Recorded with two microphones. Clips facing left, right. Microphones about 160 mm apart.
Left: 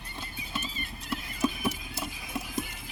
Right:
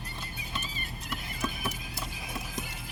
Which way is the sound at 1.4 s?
25° left (ahead or behind).